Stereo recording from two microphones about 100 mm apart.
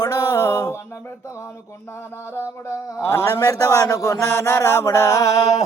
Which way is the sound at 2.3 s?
25° left (ahead or behind).